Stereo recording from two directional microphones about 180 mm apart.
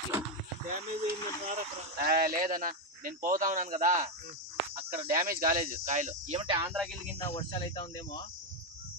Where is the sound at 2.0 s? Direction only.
55° right (ahead or behind).